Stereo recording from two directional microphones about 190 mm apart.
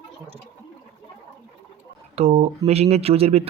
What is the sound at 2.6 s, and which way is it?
Speech, 35° right (ahead or behind).